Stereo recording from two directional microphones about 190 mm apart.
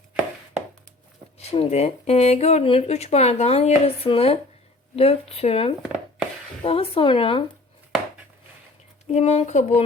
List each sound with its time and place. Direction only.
1.4 s speech: 35° left (ahead or behind)
9.0 s speech: 35° left (ahead or behind)